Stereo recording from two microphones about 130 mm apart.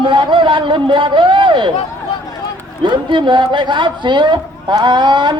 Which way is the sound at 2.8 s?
40° right (ahead or behind).